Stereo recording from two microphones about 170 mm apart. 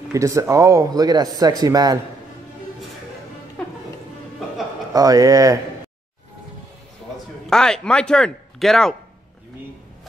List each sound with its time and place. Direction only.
0.1 s a man's voice: 20° right (ahead or behind)
4.9 s a man's voice: 20° right (ahead or behind)
7.4 s speech: 5° left (ahead or behind)